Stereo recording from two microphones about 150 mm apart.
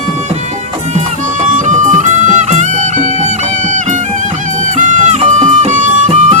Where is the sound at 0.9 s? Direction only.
55° right (ahead or behind).